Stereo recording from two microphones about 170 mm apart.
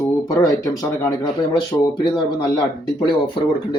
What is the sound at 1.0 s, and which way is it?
Speech, 25° left (ahead or behind).